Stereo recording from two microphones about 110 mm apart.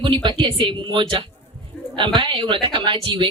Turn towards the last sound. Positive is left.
turn(degrees=-50)  # may be behind; listen again after turning